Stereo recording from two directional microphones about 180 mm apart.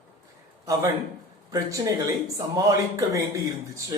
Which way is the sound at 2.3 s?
15° right (ahead or behind).